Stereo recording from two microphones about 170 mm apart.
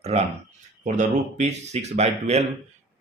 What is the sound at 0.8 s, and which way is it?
Speech, 45° right (ahead or behind).